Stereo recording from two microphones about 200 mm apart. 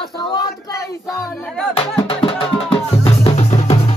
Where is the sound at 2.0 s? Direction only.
25° left (ahead or behind).